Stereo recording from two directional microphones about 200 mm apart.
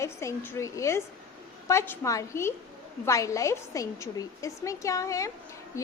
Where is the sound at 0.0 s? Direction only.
15° left (ahead or behind).